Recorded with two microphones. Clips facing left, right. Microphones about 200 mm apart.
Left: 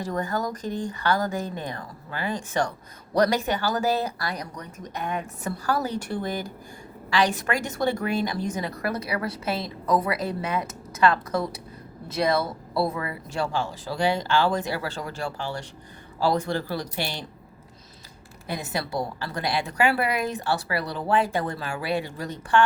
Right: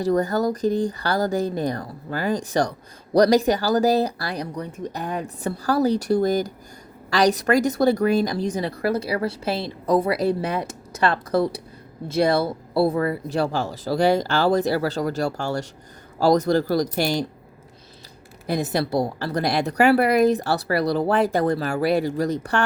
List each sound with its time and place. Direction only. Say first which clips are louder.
0.0 s speech: right 7 dB; 35° right (ahead or behind)
18.4 s speech: right 7 dB; 40° right (ahead or behind)